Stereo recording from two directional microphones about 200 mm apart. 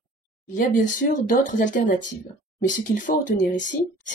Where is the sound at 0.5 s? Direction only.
40° left (ahead or behind).